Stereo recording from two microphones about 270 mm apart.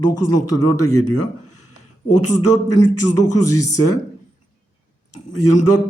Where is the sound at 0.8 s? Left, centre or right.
Left.